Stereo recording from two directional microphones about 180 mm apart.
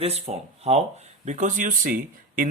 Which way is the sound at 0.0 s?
35° right (ahead or behind).